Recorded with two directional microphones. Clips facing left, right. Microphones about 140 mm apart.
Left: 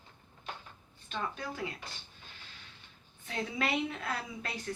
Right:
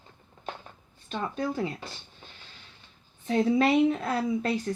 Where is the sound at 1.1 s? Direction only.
30° right (ahead or behind).